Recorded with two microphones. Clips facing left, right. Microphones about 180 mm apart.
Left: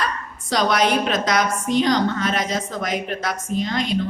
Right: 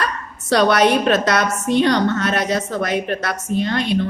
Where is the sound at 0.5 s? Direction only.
65° right (ahead or behind).